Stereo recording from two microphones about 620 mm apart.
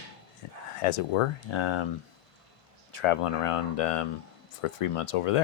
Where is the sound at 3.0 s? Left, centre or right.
Left.